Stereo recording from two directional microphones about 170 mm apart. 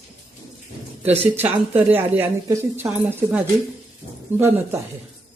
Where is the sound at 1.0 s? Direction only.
10° right (ahead or behind).